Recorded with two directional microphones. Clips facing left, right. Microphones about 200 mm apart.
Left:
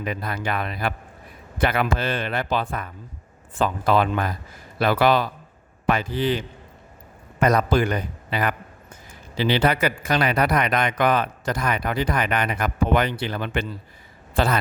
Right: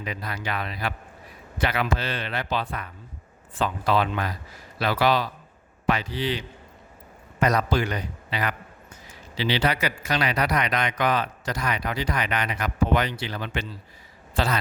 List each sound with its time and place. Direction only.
0.0 s a man's voice: 50° left (ahead or behind)